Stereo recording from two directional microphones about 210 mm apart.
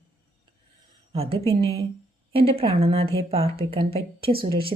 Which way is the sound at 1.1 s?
25° right (ahead or behind).